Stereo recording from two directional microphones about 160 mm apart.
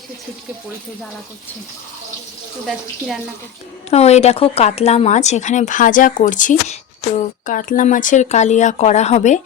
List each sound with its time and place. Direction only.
3.8 s speech: 40° left (ahead or behind)